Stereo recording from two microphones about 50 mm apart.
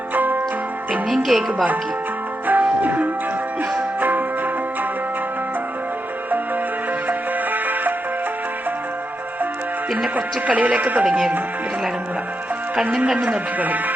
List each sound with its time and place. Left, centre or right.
0.1 s music: right
1.1 s speech: centre
2.5 s music: right
7.1 s music: right
10.2 s speech: right
12.7 s speech: centre
13.1 s speech: right